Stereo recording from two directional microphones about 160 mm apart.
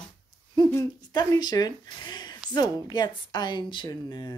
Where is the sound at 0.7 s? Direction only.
20° left (ahead or behind).